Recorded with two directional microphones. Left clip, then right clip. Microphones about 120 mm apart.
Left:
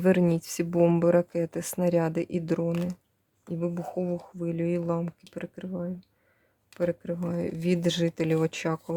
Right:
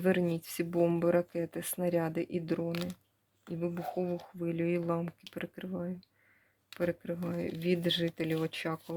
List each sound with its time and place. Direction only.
0.0 s speech: 50° left (ahead or behind)
3.5 s speech: 40° left (ahead or behind)